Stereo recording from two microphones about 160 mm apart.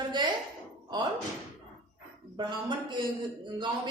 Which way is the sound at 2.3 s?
30° right (ahead or behind).